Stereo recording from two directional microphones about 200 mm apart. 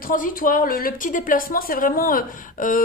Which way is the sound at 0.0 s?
45° left (ahead or behind).